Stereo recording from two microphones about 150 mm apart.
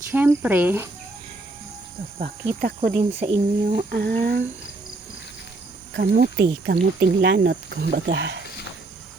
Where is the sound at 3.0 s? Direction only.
40° right (ahead or behind).